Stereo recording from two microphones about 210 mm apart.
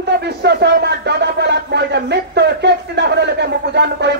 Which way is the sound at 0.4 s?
55° right (ahead or behind).